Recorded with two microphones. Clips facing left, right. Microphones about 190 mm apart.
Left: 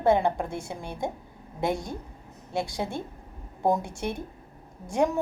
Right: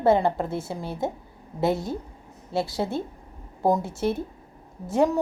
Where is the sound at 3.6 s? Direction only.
Centre (ahead or behind).